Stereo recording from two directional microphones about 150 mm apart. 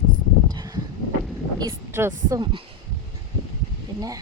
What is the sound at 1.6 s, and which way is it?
Speech, 20° right (ahead or behind).